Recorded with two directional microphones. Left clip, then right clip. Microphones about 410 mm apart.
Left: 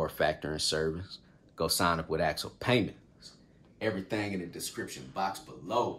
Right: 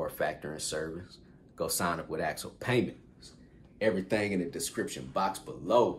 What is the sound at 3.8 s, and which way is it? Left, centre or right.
Speech, centre.